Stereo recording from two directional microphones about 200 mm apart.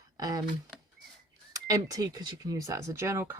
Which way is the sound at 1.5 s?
20° right (ahead or behind).